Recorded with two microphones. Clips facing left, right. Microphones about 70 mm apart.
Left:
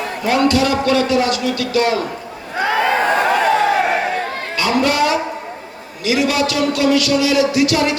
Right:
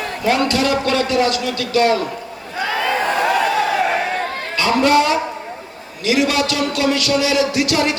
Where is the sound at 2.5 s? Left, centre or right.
Left.